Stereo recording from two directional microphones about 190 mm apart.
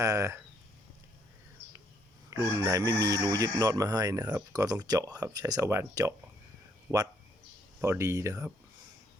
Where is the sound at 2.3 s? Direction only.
15° right (ahead or behind).